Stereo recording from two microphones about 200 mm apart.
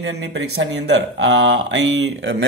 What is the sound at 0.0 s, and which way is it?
Speech, 65° right (ahead or behind).